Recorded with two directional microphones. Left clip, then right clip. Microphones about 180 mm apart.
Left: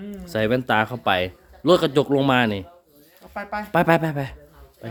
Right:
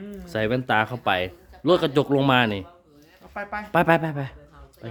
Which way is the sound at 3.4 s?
25° left (ahead or behind).